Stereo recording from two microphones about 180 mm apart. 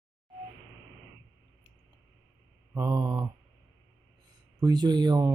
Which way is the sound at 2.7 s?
20° right (ahead or behind).